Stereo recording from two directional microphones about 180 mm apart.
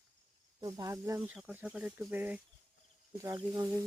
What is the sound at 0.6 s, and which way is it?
Speech, 20° right (ahead or behind).